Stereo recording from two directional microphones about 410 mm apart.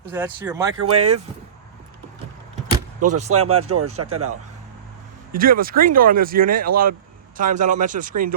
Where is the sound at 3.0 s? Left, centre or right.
Right.